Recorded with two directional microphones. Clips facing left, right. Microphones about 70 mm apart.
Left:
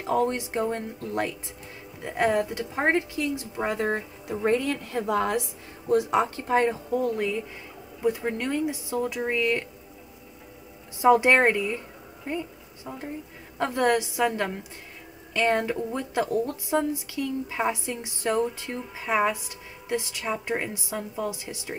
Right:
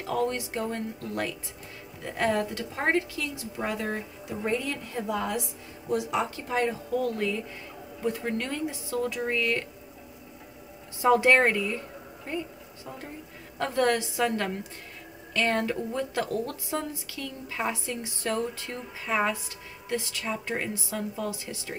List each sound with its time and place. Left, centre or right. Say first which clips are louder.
0.0 s a woman's voice: left 3 dB; left
5.9 s a woman's voice: left 5 dB; left
6.9 s speech: left 2 dB; left
11.0 s speech: left 2 dB; centre
13.6 s speech: left 2 dB; centre